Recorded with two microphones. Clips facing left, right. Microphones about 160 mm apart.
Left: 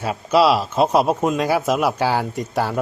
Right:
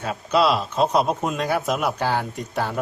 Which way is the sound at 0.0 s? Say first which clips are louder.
Left 4 dB; 5° left (ahead or behind).